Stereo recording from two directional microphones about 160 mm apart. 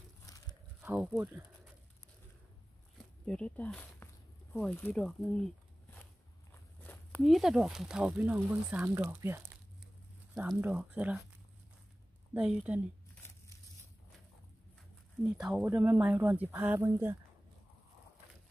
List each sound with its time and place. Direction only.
0.2 s crumpling: 25° left (ahead or behind)
0.7 s a sound: 10° right (ahead or behind)
1.1 s speech: 10° right (ahead or behind)
3.3 s speech: 10° left (ahead or behind)
6.8 s a sound: 10° left (ahead or behind)
7.2 s speech: centre (ahead or behind)
12.4 s speech: 10° right (ahead or behind)
15.2 s speech: 5° right (ahead or behind)